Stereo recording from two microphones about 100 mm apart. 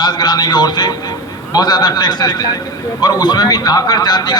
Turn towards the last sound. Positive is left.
turn(degrees=45)  # may be behind; listen again after turning